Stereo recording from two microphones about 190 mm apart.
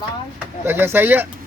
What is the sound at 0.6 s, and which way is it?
Speech, 10° right (ahead or behind).